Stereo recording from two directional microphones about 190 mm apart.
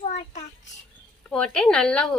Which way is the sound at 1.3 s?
5° left (ahead or behind).